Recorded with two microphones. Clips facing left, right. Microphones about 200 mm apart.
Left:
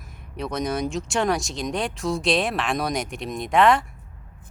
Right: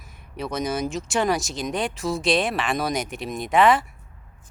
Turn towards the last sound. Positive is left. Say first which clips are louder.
# even
turn(degrees=0)  # may be behind; listen again after turning